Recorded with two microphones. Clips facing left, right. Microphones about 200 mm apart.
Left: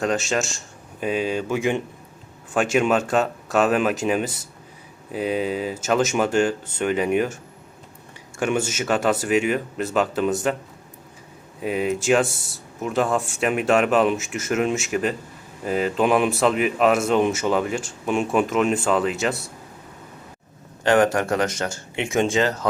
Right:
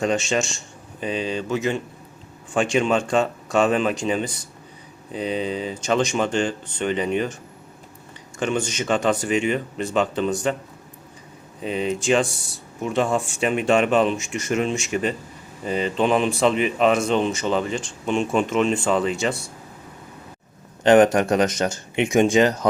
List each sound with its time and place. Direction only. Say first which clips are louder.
0.0 s speech: right 1 dB; centre (ahead or behind)
8.4 s speech: left 1 dB; 10° left (ahead or behind)
11.6 s speech: left 1 dB; 5° left (ahead or behind)
20.8 s speech: right 4 dB; 20° right (ahead or behind)